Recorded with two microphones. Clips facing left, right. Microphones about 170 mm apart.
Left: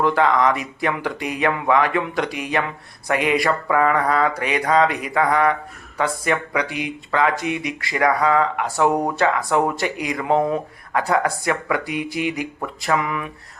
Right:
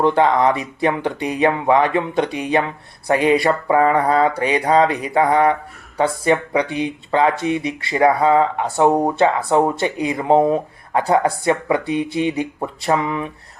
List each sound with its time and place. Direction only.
0.0 s speech: 25° right (ahead or behind)